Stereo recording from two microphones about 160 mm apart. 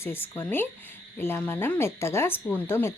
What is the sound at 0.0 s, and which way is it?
Speech, 15° left (ahead or behind).